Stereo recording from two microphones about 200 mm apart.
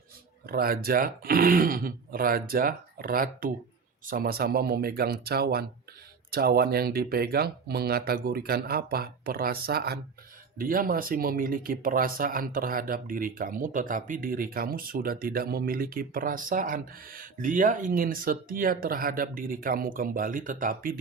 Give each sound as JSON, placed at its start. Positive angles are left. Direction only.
{"t": 0.4, "sound": "speech", "side_deg": -45}